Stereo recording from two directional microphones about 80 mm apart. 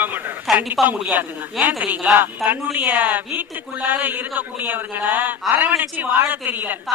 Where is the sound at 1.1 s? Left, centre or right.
Right.